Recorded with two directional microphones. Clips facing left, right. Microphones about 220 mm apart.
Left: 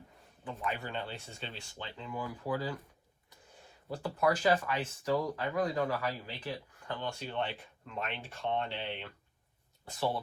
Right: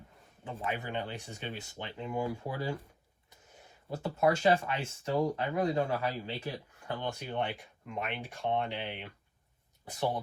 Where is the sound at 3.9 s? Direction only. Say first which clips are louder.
Right 2 dB; 25° right (ahead or behind).